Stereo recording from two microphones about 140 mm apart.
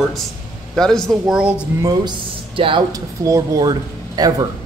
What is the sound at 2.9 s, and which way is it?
Speech, 20° right (ahead or behind).